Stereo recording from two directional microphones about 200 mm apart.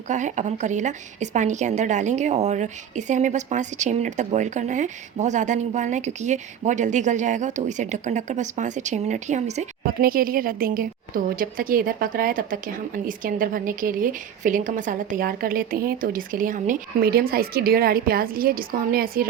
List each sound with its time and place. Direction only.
0.1 s a woman's voice: 40° right (ahead or behind)